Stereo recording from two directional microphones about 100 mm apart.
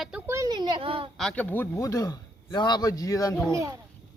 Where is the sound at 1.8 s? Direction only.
35° left (ahead or behind).